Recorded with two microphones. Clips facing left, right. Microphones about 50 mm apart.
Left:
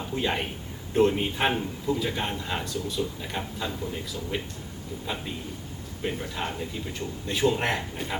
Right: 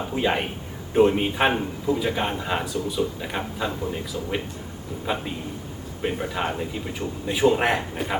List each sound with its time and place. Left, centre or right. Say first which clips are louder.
0.2 s a man's voice: right 5 dB; centre